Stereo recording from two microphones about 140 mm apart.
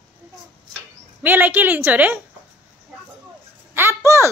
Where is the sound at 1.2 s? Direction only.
10° right (ahead or behind).